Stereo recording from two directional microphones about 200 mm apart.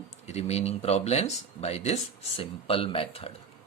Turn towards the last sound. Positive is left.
turn(degrees=30)  # may be behind; listen again after turning